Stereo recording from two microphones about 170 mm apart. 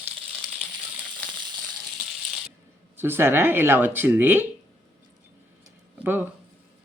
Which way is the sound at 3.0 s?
15° right (ahead or behind).